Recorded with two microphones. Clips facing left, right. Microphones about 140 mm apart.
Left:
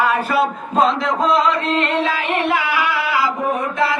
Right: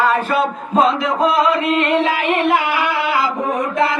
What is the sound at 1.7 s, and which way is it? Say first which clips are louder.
Singing: right 3 dB; 15° right (ahead or behind).